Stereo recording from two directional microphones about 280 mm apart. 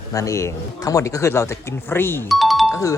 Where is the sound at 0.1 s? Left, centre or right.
Centre.